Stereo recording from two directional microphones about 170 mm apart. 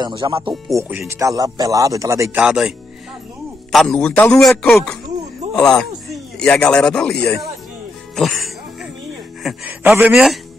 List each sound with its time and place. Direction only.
0.0 s speech: 25° right (ahead or behind)
0.7 s speech: 10° right (ahead or behind)
2.4 s a man's voice: 5° right (ahead or behind)
3.7 s a man's voice: centre (ahead or behind)